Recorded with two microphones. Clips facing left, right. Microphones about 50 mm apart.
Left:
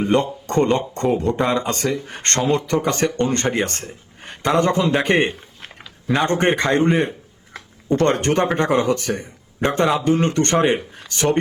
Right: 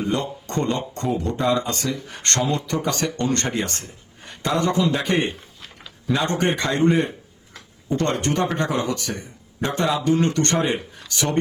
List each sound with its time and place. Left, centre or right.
0.0 s speech: left
7.5 s a sound: left
8.5 s speech: left